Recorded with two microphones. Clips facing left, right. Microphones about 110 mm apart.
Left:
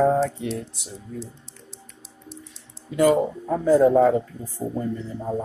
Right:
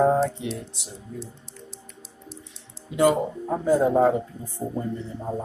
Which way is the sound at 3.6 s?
20° right (ahead or behind).